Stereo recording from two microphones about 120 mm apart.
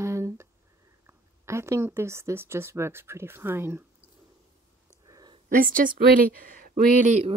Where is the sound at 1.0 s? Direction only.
20° right (ahead or behind).